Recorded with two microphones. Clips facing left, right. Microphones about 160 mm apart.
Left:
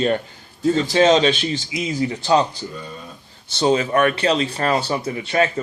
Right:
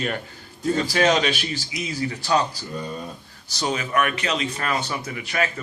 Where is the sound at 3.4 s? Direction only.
25° left (ahead or behind).